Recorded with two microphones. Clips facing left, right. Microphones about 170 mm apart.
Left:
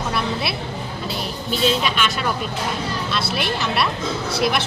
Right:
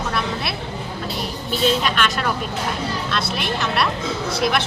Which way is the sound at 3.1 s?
5° left (ahead or behind).